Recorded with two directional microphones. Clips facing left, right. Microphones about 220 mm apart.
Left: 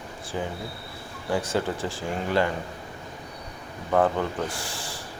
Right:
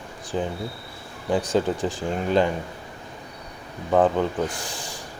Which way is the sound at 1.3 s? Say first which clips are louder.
Right 4 dB; 15° right (ahead or behind).